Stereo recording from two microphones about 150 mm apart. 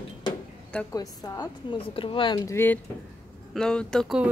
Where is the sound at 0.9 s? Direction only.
25° left (ahead or behind).